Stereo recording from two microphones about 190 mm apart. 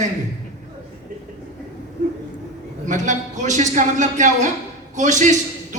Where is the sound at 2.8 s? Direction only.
40° right (ahead or behind).